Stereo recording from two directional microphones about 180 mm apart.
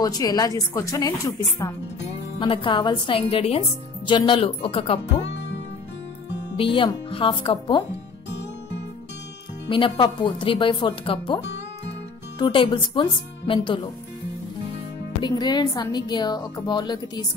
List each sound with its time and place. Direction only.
0.0 s a woman's voice: 20° left (ahead or behind)
5.3 s music: 80° left
6.5 s a woman's voice: 30° left (ahead or behind)
9.7 s a woman's voice: 30° left (ahead or behind)
15.2 s a woman's voice: 25° left (ahead or behind)